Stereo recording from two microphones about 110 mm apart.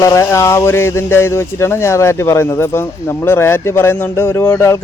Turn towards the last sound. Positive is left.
turn(degrees=25)  # may be behind; listen again after turning